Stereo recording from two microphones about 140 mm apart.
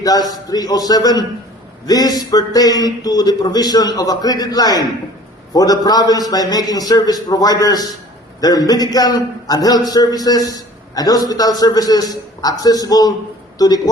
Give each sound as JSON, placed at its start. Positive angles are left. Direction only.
{"t": 0.0, "sound": "a man's voice", "side_deg": 25}